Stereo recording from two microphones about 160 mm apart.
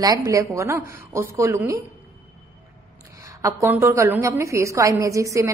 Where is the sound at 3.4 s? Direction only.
20° right (ahead or behind).